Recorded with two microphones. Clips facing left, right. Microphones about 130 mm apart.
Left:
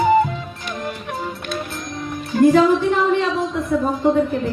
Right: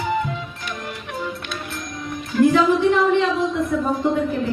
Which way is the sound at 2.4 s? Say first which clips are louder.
Left 3 dB; 40° left (ahead or behind).